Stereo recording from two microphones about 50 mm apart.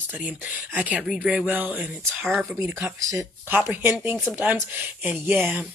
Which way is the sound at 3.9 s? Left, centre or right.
Right.